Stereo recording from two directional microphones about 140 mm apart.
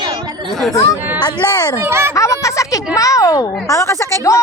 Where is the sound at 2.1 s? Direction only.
20° left (ahead or behind).